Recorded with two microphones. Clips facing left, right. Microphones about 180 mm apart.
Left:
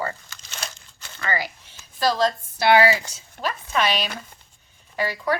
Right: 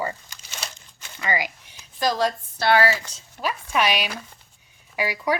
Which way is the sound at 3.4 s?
10° right (ahead or behind).